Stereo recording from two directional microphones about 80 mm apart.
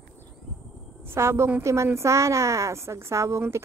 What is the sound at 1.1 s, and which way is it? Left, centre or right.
A woman's voice, right.